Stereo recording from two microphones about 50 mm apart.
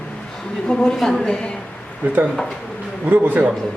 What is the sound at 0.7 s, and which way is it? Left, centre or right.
Speech, centre.